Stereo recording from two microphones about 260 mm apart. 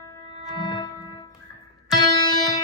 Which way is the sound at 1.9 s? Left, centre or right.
Centre.